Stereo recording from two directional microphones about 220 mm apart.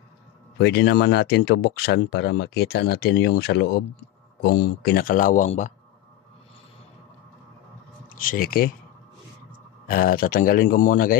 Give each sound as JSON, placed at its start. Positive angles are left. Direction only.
{"t": 0.6, "sound": "speech", "side_deg": 50}
{"t": 8.1, "sound": "speech", "side_deg": 40}
{"t": 9.8, "sound": "speech", "side_deg": 40}